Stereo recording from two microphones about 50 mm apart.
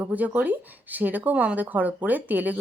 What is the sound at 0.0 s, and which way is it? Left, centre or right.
Speech, right.